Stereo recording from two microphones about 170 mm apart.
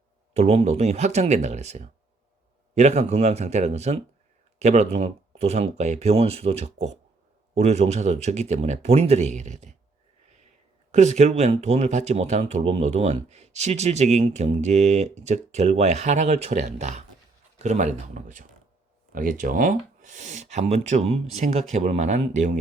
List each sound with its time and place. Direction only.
0.3 s speech: 40° right (ahead or behind)
10.2 s a sound: 45° right (ahead or behind)
10.9 s speech: 40° right (ahead or behind)